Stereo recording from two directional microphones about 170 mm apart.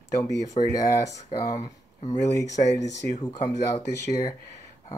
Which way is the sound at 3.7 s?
20° left (ahead or behind).